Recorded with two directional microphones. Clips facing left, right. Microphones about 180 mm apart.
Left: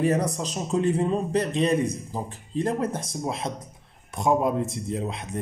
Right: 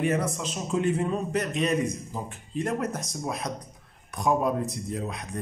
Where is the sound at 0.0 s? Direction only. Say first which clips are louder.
Left 3 dB; 35° left (ahead or behind).